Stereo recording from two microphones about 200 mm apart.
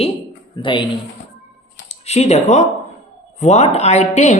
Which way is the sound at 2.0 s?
35° left (ahead or behind).